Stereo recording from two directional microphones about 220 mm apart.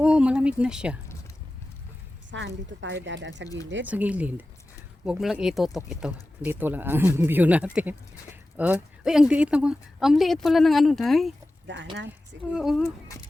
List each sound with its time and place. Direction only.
0.0 s speech: 5° right (ahead or behind)
2.3 s speech: 55° right (ahead or behind)
3.8 s speech: 5° right (ahead or behind)
12.5 s speech: centre (ahead or behind)